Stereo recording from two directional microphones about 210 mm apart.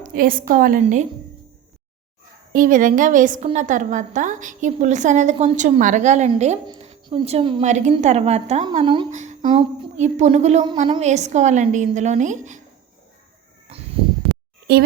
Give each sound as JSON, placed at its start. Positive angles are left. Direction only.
{"t": 0.0, "sound": "a woman's voice", "side_deg": -40}
{"t": 2.5, "sound": "a woman's voice", "side_deg": -40}
{"t": 9.2, "sound": "music", "side_deg": -35}
{"t": 9.5, "sound": "a woman's voice", "side_deg": -25}
{"t": 13.7, "sound": "a sound", "side_deg": -30}
{"t": 14.7, "sound": "a woman's voice", "side_deg": -50}